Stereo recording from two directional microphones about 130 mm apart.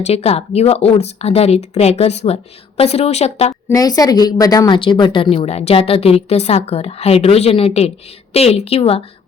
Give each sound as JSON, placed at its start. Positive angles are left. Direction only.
{"t": 0.0, "sound": "a woman's voice", "side_deg": 55}
{"t": 3.5, "sound": "a woman's voice", "side_deg": 25}